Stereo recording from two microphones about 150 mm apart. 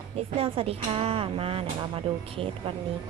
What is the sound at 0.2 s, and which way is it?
Speech, 40° right (ahead or behind).